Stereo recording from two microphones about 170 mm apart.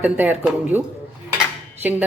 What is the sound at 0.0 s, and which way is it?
Speech, 10° right (ahead or behind).